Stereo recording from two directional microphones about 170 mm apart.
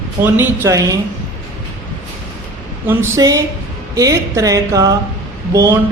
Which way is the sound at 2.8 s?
15° right (ahead or behind).